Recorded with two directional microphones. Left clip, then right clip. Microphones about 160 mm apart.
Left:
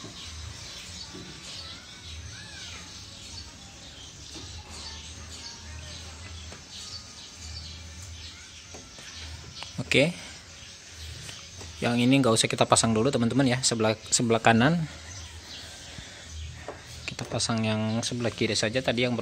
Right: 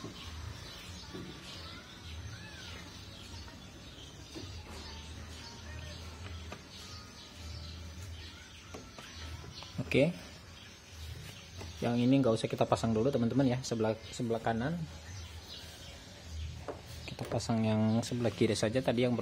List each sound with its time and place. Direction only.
9.8 s speech: centre (ahead or behind)
11.8 s speech: 10° left (ahead or behind)
14.3 s speech: 25° left (ahead or behind)
17.0 s speech: centre (ahead or behind)